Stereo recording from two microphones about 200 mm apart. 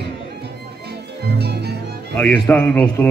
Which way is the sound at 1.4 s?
55° right (ahead or behind).